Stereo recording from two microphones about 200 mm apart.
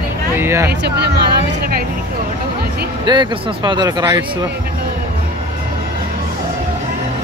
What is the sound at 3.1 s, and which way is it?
Speech, 20° right (ahead or behind).